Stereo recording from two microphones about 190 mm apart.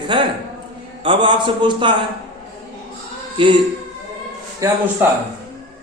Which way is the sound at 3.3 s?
25° right (ahead or behind).